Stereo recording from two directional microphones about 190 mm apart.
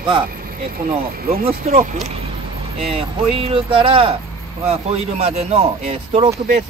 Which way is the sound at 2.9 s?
30° right (ahead or behind).